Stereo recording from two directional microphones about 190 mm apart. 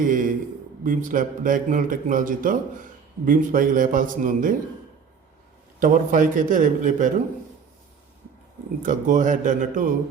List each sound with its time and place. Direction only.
0.0 s a man's voice: 45° right (ahead or behind)
5.8 s a man's voice: 45° right (ahead or behind)
8.8 s a man's voice: 45° right (ahead or behind)